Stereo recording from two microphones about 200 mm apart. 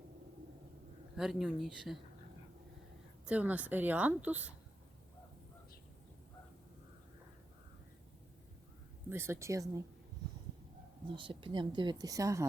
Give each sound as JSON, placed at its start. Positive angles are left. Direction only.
{"t": 1.1, "sound": "speech", "side_deg": 0}
{"t": 3.2, "sound": "a woman's voice", "side_deg": -5}
{"t": 9.0, "sound": "a woman's voice", "side_deg": -10}
{"t": 11.1, "sound": "speech", "side_deg": -25}